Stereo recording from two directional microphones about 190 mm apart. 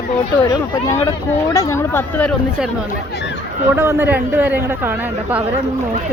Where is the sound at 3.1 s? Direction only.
65° left (ahead or behind).